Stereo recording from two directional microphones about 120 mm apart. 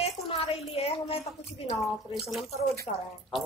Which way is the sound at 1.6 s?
55° left (ahead or behind).